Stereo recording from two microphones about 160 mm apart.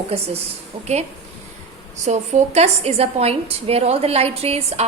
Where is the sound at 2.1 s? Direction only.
45° right (ahead or behind).